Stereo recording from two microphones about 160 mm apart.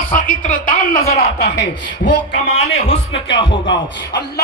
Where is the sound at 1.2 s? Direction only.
90° left.